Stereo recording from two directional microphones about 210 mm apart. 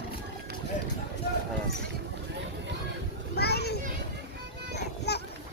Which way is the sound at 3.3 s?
50° left (ahead or behind).